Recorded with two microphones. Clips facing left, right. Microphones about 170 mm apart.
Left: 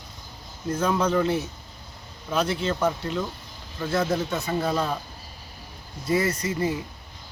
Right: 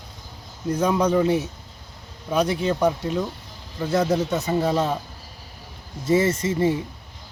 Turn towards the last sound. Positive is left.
turn(degrees=-25)  # may be behind; listen again after turning